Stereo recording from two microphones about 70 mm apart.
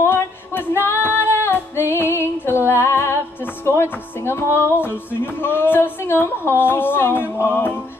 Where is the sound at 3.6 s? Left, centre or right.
Left.